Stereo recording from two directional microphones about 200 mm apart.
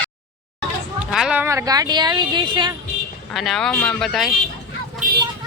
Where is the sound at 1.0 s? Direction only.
5° right (ahead or behind); by 2.8 s 20° right (ahead or behind).